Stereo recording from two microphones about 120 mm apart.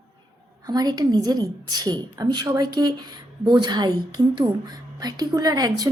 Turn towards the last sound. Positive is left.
turn(degrees=-30)  # may be behind; listen again after turning